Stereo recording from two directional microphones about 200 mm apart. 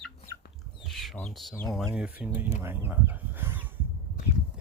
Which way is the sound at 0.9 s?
Centre (ahead or behind).